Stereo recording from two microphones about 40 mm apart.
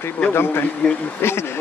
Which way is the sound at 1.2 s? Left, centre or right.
Left.